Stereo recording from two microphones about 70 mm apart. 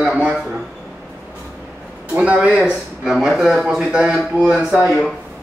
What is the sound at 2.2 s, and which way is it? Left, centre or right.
Speech, centre.